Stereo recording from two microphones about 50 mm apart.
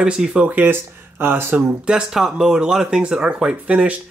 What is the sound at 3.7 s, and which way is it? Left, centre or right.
Speech, right.